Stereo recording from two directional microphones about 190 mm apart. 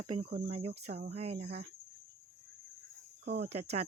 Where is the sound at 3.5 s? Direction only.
35° right (ahead or behind).